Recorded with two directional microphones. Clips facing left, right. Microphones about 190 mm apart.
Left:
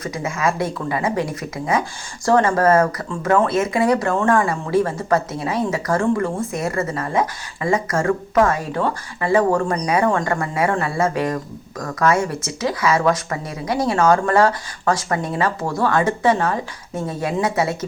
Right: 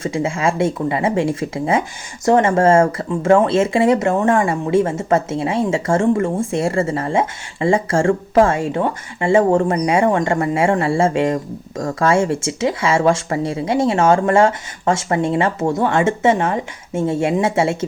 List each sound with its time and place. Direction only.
0.0 s speech: 25° right (ahead or behind)